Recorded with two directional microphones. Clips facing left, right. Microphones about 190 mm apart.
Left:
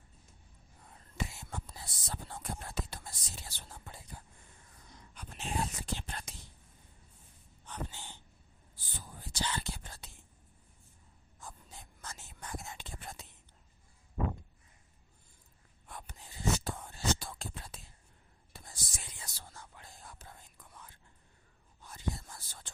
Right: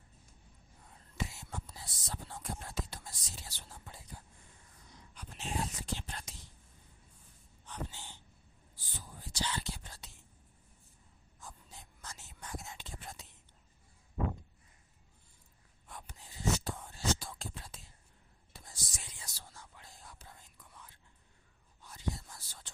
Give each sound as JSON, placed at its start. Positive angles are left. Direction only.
{"t": 1.2, "sound": "whispering", "side_deg": 55}
{"t": 5.1, "sound": "whispering", "side_deg": 55}
{"t": 7.7, "sound": "a sound", "side_deg": 55}
{"t": 8.7, "sound": "whispering", "side_deg": 55}
{"t": 11.3, "sound": "whispering", "side_deg": 55}
{"t": 15.9, "sound": "whispering", "side_deg": 60}